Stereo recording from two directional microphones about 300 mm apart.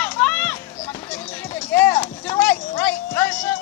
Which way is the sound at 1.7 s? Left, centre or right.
Centre.